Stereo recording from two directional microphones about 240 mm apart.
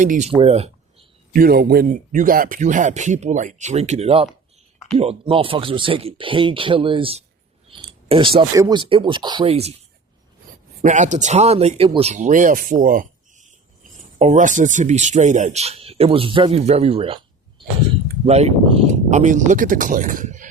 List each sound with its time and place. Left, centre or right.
0.0 s speech: right
1.3 s speech: right
10.8 s speech: right
18.3 s speech: right